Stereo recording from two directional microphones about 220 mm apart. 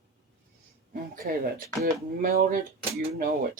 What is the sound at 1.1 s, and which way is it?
Speech, 40° right (ahead or behind).